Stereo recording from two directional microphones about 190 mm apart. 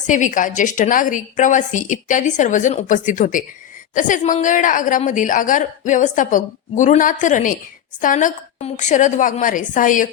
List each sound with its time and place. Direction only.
0.1 s a woman's voice: 40° left (ahead or behind)